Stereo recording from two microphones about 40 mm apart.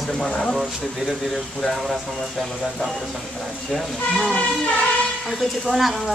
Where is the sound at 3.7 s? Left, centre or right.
Centre.